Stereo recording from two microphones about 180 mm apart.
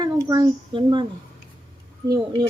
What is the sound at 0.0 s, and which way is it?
A child's voice, 20° right (ahead or behind).